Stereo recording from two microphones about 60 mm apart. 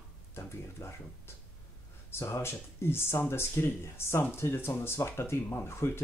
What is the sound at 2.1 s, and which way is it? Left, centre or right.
Speech, left.